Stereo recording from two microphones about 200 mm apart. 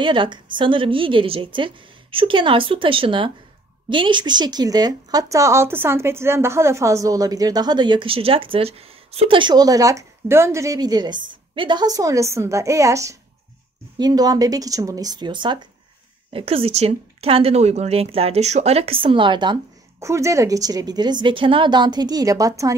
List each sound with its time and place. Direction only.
0.0 s a woman's voice: 25° right (ahead or behind)